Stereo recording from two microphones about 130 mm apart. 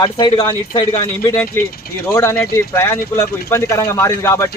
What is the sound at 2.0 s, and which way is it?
Speech, 20° left (ahead or behind).